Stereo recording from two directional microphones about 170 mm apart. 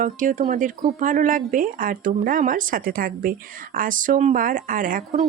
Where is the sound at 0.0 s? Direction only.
50° right (ahead or behind).